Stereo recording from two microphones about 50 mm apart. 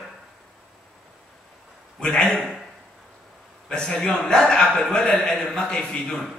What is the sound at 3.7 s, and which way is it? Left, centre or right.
A man's voice, centre.